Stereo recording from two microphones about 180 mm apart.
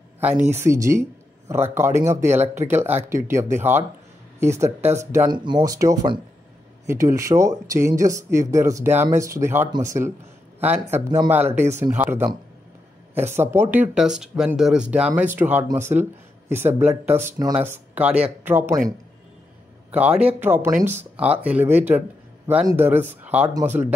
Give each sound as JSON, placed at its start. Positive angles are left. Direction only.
{"t": 0.5, "sound": "speech", "side_deg": -15}
{"t": 11.0, "sound": "speech", "side_deg": -20}
{"t": 19.9, "sound": "speech", "side_deg": -10}